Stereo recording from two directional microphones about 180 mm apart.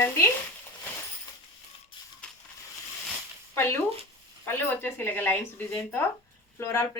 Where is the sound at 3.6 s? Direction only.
15° left (ahead or behind).